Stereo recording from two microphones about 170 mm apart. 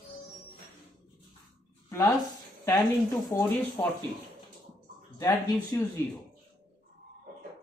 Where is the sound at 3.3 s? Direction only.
10° left (ahead or behind).